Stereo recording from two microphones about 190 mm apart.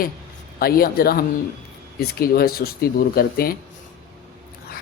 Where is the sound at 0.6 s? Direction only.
55° left (ahead or behind).